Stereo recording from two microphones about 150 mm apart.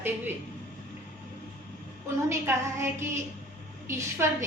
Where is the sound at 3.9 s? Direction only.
15° right (ahead or behind).